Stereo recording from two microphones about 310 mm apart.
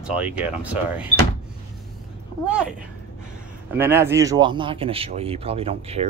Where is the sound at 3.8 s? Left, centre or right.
Centre.